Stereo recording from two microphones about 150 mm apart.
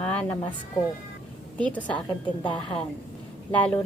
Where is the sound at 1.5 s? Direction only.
10° left (ahead or behind).